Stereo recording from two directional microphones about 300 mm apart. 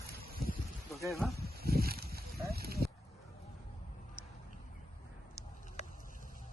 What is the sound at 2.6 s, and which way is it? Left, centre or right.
Dog, right.